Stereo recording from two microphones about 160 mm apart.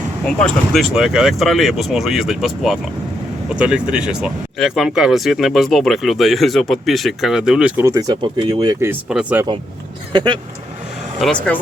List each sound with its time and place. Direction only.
0.3 s speech: 5° left (ahead or behind)
7.8 s speech: 20° right (ahead or behind)
8.8 s speech: 10° right (ahead or behind)
10.1 s speech: 30° right (ahead or behind)
11.2 s speech: 5° left (ahead or behind)